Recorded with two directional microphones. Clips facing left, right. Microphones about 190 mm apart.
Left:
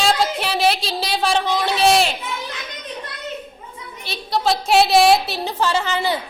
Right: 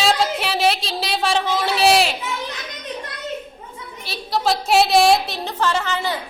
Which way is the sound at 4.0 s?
Centre (ahead or behind).